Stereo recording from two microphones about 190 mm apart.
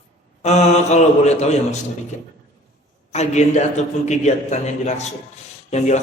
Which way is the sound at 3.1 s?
35° left (ahead or behind).